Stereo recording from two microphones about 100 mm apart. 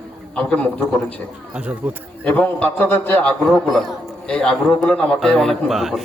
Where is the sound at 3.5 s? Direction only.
Centre (ahead or behind).